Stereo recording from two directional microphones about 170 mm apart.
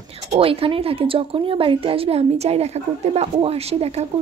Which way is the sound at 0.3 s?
35° right (ahead or behind).